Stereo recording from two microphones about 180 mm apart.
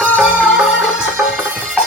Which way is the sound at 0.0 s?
5° right (ahead or behind).